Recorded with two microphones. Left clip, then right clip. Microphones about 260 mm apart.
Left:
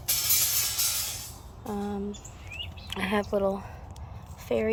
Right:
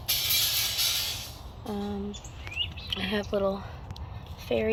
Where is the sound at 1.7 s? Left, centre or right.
Centre.